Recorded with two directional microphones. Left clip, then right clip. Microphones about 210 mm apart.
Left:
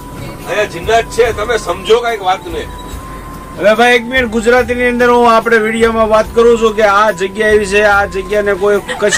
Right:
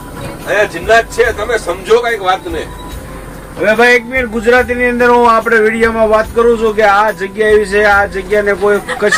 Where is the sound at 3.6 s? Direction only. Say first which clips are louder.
Even; 10° left (ahead or behind).